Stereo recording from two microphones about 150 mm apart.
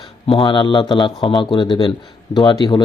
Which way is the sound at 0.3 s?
30° left (ahead or behind).